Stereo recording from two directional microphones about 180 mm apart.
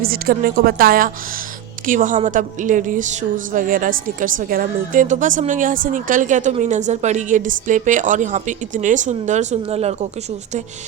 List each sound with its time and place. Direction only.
0.0 s a woman's voice: 55° right (ahead or behind); by 10.1 s 35° right (ahead or behind)